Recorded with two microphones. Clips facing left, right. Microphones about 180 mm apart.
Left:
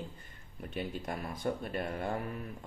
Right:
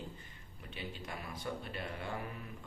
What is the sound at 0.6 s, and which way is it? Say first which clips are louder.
Speech: left 8 dB; 50° left (ahead or behind).